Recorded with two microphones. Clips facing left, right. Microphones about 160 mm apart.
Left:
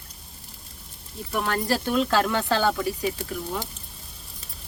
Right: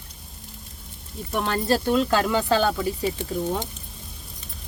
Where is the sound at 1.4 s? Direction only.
20° right (ahead or behind).